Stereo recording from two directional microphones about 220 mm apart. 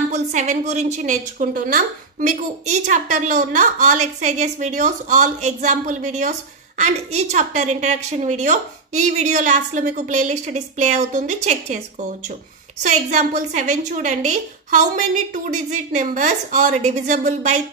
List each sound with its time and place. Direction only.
0.1 s a woman's voice: 30° right (ahead or behind)
12.8 s a woman's voice: 35° right (ahead or behind)